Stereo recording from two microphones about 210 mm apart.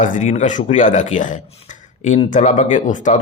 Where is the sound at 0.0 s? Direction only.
35° left (ahead or behind).